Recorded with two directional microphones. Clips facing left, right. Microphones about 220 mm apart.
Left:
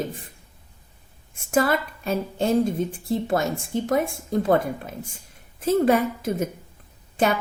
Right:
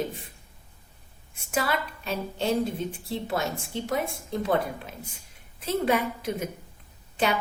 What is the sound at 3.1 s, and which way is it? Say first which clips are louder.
A woman's voice: left 7 dB; 50° left (ahead or behind).